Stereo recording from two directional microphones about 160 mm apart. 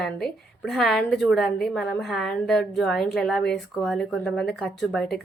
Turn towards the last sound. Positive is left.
turn(degrees=0)  # may be behind; listen again after turning